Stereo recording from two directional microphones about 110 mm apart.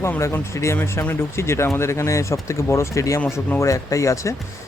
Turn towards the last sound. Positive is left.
turn(degrees=30)  # may be behind; listen again after turning